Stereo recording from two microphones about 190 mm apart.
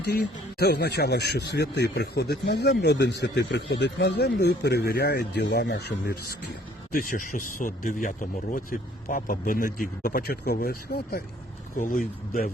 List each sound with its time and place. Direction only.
0.6 s speech: 60° left (ahead or behind)
6.9 s speech: 45° left (ahead or behind)